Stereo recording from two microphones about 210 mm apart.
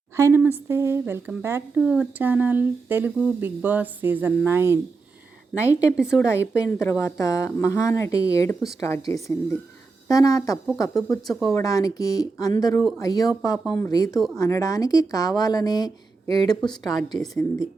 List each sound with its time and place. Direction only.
0.2 s a woman's voice: 10° right (ahead or behind)
5.5 s speech: 15° left (ahead or behind)
11.3 s a woman's voice: centre (ahead or behind)
11.5 s speech: 15° left (ahead or behind)
17.1 s a woman's voice: centre (ahead or behind)